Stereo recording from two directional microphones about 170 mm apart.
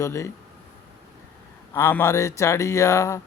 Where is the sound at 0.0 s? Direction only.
15° left (ahead or behind).